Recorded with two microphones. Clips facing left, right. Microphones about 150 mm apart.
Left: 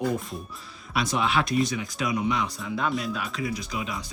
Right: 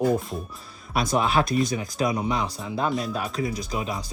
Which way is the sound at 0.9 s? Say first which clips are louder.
Right 3 dB; 40° right (ahead or behind).